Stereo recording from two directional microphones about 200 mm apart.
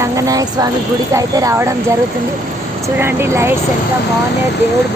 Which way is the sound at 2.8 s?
10° right (ahead or behind).